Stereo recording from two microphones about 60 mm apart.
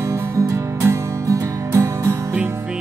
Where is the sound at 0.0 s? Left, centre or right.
Right.